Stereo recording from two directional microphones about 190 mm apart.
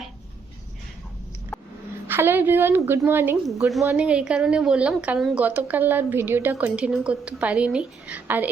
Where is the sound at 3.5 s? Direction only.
Centre (ahead or behind).